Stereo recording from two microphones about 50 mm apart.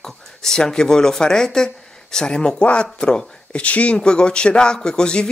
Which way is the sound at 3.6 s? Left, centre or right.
Left.